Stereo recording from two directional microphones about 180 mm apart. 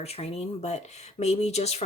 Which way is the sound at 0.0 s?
35° left (ahead or behind).